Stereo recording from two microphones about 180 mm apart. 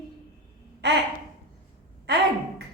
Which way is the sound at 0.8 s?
70° right (ahead or behind).